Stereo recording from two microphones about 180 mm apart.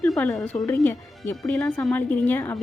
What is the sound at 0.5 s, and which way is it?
Speech, 15° left (ahead or behind).